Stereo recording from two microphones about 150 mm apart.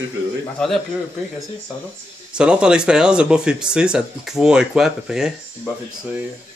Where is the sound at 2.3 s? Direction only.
5° right (ahead or behind).